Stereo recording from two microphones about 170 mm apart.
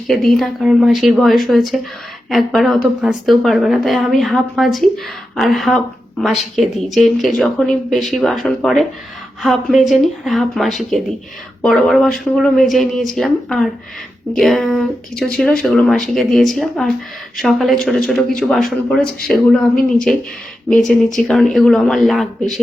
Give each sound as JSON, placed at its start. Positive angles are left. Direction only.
{"t": 0.1, "sound": "speech", "side_deg": 0}
{"t": 20.1, "sound": "speech", "side_deg": 5}